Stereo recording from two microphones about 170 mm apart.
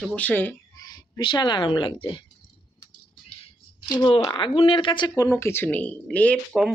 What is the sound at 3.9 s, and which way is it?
Speech, 25° left (ahead or behind).